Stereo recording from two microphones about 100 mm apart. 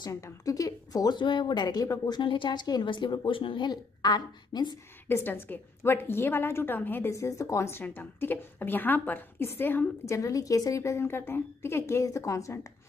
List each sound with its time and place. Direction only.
0.0 s speech: 35° left (ahead or behind)
5.0 s a woman's voice: 20° left (ahead or behind)